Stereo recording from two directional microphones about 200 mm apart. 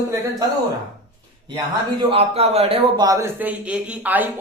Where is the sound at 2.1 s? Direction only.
30° right (ahead or behind); by 4.3 s 10° right (ahead or behind).